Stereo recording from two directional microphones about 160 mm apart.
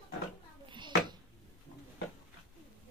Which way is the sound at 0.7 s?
30° right (ahead or behind).